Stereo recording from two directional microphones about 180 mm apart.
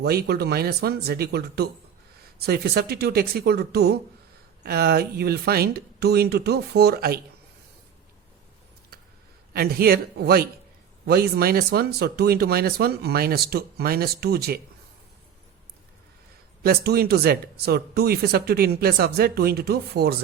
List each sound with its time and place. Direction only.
0.0 s speech: 60° right (ahead or behind)
9.5 s speech: 60° right (ahead or behind)
16.6 s speech: 60° right (ahead or behind)